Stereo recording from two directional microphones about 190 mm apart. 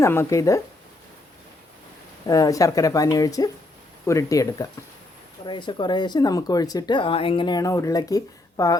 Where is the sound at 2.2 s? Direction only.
20° left (ahead or behind).